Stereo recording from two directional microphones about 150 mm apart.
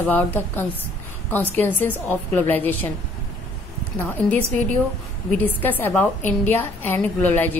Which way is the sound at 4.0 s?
10° left (ahead or behind).